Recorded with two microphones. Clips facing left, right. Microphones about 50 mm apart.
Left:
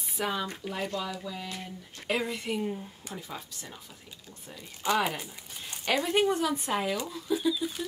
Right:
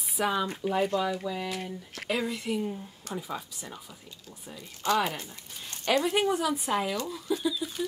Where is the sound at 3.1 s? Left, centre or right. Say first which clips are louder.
Right 6 dB; centre.